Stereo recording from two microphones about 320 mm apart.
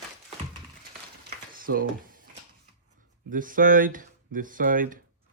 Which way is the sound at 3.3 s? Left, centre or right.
Right.